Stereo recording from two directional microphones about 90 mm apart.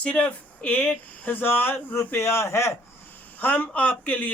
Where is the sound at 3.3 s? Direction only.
15° left (ahead or behind).